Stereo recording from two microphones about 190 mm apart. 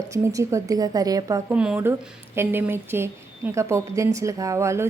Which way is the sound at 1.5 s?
10° right (ahead or behind).